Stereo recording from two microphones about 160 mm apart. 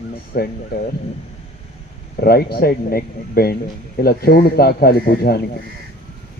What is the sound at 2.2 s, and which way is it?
Speech, 75° left (ahead or behind).